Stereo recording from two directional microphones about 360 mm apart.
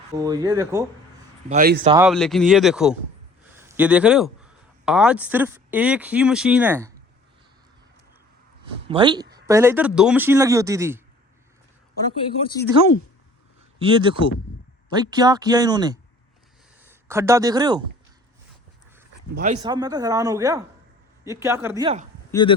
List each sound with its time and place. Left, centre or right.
0.1 s speech: centre
1.5 s speech: right
1.9 s speech: centre
8.9 s speech: centre
12.4 s speech: centre
13.7 s speech: centre
19.6 s speech: centre
22.3 s speech: centre